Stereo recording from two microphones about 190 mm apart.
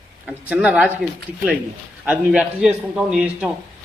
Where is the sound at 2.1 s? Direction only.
5° right (ahead or behind).